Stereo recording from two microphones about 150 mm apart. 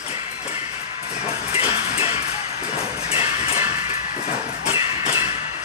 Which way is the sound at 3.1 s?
40° left (ahead or behind).